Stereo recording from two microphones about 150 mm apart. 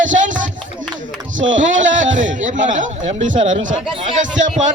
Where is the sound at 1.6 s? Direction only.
55° right (ahead or behind).